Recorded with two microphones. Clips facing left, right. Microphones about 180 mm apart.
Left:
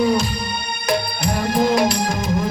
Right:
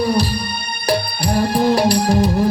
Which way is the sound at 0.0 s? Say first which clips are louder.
Even; 35° right (ahead or behind).